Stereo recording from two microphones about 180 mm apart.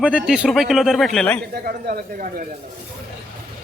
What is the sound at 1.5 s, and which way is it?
Speech, 60° right (ahead or behind).